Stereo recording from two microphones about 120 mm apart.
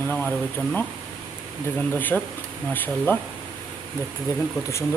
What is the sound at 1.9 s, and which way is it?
Speech, 15° left (ahead or behind).